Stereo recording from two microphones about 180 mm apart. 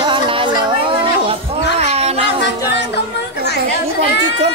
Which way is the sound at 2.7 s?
70° left (ahead or behind).